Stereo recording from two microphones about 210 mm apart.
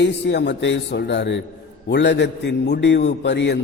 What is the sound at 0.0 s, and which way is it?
A man's voice, 55° left (ahead or behind).